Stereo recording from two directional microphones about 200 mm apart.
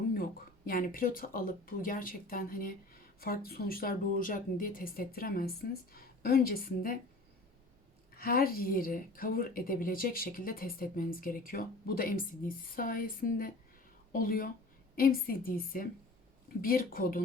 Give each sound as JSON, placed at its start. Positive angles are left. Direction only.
{"t": 0.2, "sound": "a woman's voice", "side_deg": 45}
{"t": 8.1, "sound": "a woman's voice", "side_deg": 45}